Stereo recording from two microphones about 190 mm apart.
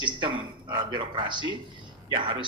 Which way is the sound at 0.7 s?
25° right (ahead or behind).